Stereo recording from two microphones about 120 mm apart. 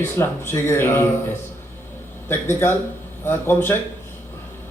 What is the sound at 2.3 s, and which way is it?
A man's voice, 20° left (ahead or behind).